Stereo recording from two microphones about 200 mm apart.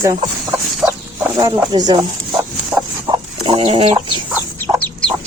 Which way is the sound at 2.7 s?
Centre (ahead or behind).